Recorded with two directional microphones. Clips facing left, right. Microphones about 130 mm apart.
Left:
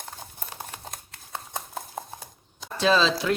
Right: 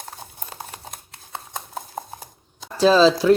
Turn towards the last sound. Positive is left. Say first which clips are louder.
# right 7 dB
turn(degrees=-35)  # may be behind; listen again after turning